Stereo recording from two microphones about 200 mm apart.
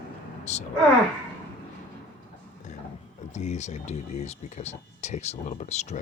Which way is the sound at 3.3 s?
35° left (ahead or behind).